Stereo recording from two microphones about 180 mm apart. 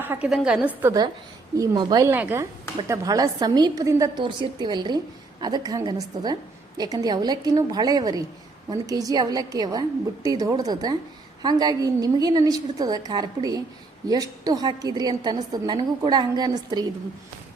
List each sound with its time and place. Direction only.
0.0 s speech: 10° right (ahead or behind)
1.5 s a woman's voice: 25° right (ahead or behind)